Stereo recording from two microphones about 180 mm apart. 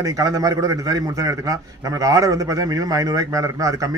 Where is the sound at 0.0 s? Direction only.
20° right (ahead or behind).